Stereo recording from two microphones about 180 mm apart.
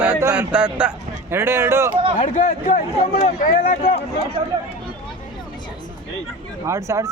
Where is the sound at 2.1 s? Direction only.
45° left (ahead or behind).